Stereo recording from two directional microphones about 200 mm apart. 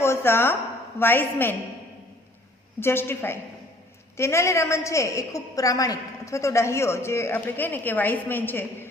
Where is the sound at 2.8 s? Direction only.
10° left (ahead or behind).